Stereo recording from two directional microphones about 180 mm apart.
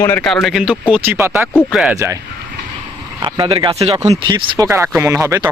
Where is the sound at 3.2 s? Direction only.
25° right (ahead or behind).